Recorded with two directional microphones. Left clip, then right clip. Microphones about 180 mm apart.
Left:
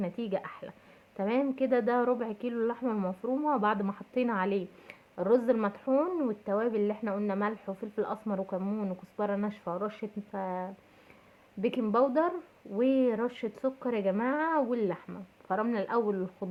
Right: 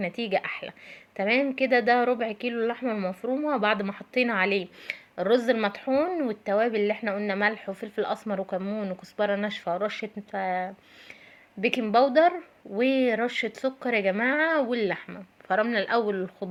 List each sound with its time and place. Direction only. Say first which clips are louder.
0.0 s speech: right 7 dB; 15° right (ahead or behind)
3.2 s speech: right 2 dB; 25° right (ahead or behind)
3.6 s speech: right 4 dB; 15° right (ahead or behind)
8.4 s speech: right 4 dB; 30° right (ahead or behind)
8.8 s speech: right 6 dB; 15° right (ahead or behind)
11.9 s speech: right 8 dB; 10° right (ahead or behind)